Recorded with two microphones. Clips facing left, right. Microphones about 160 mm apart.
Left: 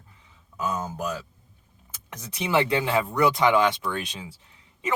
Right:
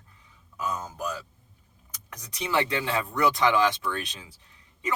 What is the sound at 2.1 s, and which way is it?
Speech, 25° left (ahead or behind).